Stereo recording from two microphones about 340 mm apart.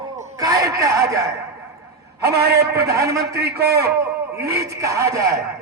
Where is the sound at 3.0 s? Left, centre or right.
Centre.